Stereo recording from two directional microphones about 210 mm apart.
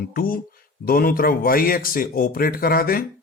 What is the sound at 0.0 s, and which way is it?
Speech, 45° left (ahead or behind).